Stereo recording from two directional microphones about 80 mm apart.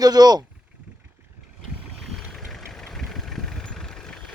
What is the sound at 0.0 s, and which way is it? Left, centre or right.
Speech, right.